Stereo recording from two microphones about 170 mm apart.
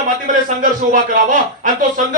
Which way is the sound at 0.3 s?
50° right (ahead or behind).